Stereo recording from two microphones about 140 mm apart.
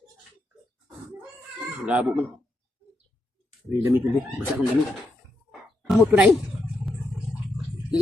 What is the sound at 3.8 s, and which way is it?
Speech, 15° right (ahead or behind).